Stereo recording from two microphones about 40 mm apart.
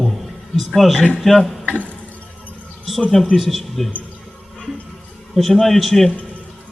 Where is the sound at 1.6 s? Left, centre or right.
Left.